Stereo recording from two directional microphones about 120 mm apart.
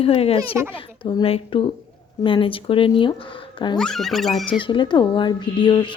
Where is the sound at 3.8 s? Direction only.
5° left (ahead or behind).